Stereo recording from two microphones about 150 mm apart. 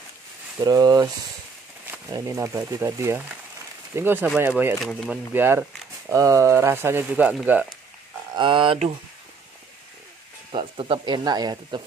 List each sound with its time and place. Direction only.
0.6 s speech: 25° right (ahead or behind)
2.1 s speech: 20° right (ahead or behind)
4.7 s speech: centre (ahead or behind)
5.1 s speech: 15° right (ahead or behind)
8.3 s speech: 35° right (ahead or behind)
10.5 s speech: 35° right (ahead or behind)